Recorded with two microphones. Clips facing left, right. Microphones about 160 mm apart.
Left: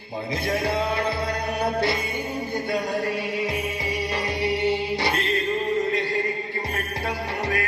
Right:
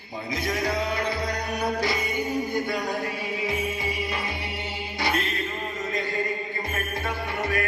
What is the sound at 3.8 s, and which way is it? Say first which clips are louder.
Music: left 3 dB; 40° left (ahead or behind).